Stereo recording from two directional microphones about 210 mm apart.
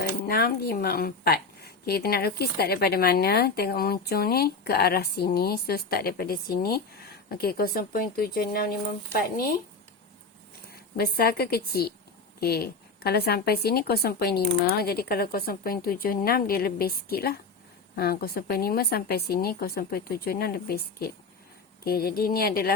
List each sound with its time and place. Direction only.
0.3 s a woman's voice: 45° left (ahead or behind)
10.9 s a woman's voice: 45° left (ahead or behind)